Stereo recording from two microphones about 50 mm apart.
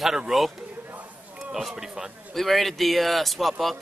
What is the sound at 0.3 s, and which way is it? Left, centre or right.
Speech, centre.